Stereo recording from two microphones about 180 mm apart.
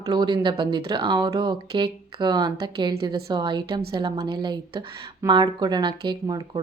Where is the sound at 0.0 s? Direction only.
25° right (ahead or behind).